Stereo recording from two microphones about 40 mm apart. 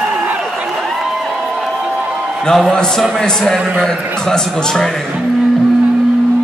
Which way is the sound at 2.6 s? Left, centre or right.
Centre.